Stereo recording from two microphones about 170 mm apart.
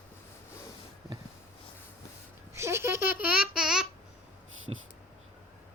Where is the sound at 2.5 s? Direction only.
15° right (ahead or behind).